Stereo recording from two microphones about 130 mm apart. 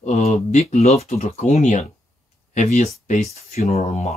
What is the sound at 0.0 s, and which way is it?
Speech, 65° left (ahead or behind).